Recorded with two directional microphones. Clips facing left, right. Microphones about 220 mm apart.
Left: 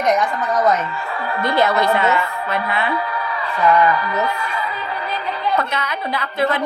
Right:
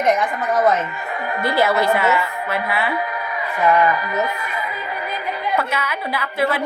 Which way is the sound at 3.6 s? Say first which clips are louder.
Left 1 dB; 20° right (ahead or behind).